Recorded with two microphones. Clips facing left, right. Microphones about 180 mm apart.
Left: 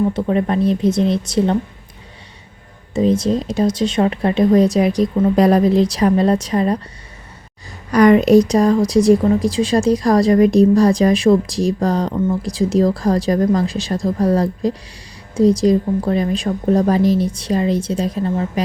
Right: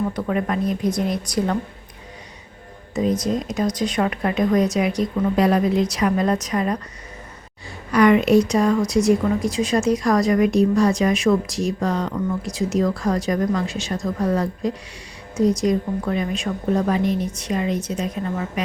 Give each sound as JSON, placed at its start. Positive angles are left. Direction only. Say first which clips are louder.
{"t": 0.1, "sound": "speech", "louder": "left 5 dB", "side_deg": 25}
{"t": 2.9, "sound": "a woman's voice", "louder": "left 5 dB", "side_deg": 25}
{"t": 7.9, "sound": "a woman's voice", "louder": "left 4 dB", "side_deg": 40}